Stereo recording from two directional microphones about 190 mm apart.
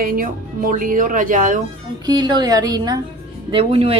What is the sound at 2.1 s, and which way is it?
A woman's voice, 20° right (ahead or behind).